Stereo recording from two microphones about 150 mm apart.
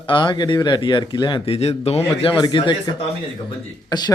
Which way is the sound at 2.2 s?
30° left (ahead or behind).